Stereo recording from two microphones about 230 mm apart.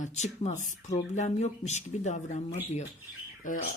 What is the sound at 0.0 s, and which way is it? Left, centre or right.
Speech, left.